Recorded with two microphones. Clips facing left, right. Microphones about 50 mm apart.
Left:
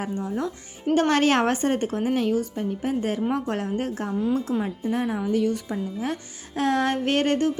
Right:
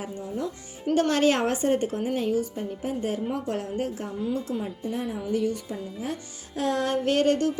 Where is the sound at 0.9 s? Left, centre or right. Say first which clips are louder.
Left 2 dB; left.